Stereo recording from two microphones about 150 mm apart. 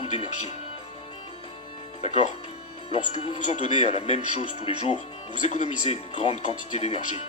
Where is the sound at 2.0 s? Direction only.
45° left (ahead or behind).